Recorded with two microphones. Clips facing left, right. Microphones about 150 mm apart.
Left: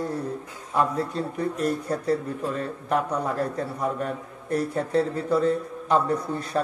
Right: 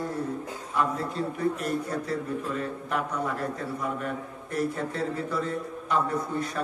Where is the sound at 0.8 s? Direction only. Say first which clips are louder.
Left 3 dB; 35° left (ahead or behind).